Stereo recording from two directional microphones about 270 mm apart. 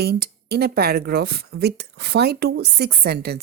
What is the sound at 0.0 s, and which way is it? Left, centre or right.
A woman's voice, right.